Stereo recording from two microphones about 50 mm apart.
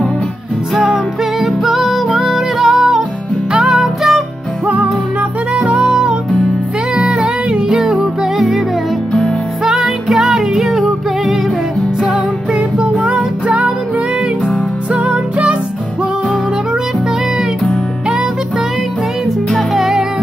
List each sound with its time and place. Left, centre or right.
1.4 s music: centre
5.7 s music: right
7.0 s music: centre
9.7 s music: centre
13.0 s music: right
14.9 s music: right
19.5 s music: centre